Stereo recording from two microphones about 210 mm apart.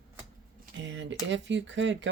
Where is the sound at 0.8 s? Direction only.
60° right (ahead or behind).